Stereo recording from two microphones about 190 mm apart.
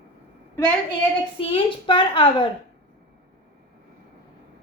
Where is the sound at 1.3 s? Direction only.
30° left (ahead or behind).